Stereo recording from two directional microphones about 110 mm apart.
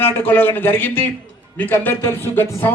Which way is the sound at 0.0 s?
15° left (ahead or behind).